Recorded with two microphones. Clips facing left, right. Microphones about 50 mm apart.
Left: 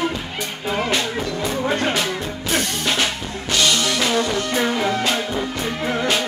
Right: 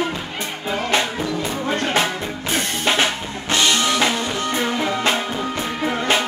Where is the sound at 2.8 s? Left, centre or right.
Right.